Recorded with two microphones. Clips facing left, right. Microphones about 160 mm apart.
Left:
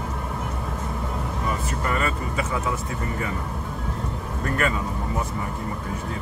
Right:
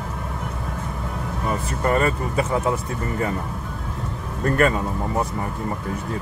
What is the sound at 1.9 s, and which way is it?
Speech, 35° right (ahead or behind).